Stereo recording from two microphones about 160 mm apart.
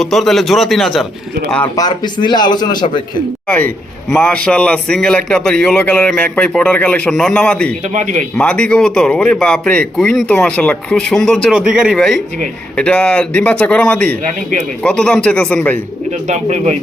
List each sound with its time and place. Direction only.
0.0 s a man's voice: centre (ahead or behind)
1.6 s a man's voice: 25° left (ahead or behind)
4.1 s a man's voice: 5° left (ahead or behind)
7.9 s speech: 50° right (ahead or behind)
8.4 s a man's voice: 5° left (ahead or behind)
16.2 s speech: 45° right (ahead or behind)